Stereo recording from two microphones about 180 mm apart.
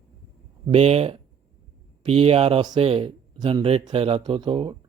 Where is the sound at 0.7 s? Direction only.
35° right (ahead or behind).